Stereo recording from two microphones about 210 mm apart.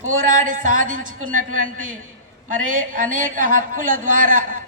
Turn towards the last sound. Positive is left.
turn(degrees=-40)  # may be behind; listen again after turning